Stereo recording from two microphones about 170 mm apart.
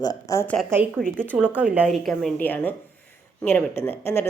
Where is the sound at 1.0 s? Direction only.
5° left (ahead or behind).